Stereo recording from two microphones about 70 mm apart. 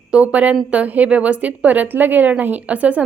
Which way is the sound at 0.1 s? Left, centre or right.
Centre.